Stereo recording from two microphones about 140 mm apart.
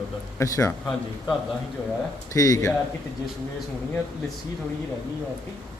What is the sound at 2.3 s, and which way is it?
Speech, 25° left (ahead or behind).